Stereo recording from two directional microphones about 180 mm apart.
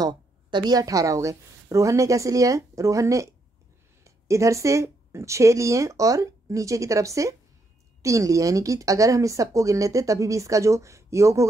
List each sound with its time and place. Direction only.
0.0 s a woman's voice: 25° right (ahead or behind)